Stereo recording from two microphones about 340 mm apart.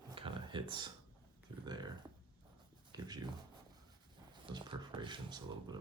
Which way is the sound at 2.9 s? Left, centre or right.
Centre.